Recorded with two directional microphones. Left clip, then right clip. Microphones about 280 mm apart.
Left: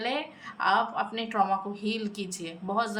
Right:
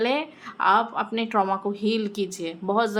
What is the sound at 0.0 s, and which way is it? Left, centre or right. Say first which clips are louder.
A woman's voice: right 7 dB; centre.